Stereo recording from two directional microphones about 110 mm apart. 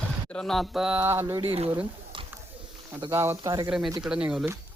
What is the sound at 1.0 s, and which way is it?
Speech, 20° right (ahead or behind).